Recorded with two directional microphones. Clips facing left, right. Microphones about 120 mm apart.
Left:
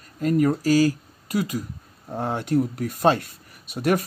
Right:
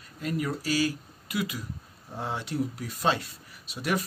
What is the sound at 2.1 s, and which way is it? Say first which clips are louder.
Speech: left 8 dB; 50° left (ahead or behind).